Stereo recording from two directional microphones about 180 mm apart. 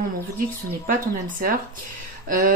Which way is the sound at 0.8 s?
50° right (ahead or behind).